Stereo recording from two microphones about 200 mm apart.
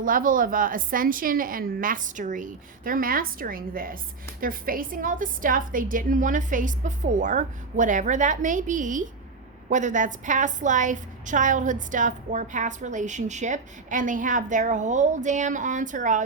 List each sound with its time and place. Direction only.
0.0 s a woman's voice: 45° right (ahead or behind)